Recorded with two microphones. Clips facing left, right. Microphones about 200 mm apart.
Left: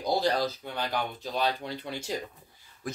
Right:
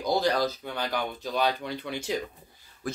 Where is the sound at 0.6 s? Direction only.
50° right (ahead or behind).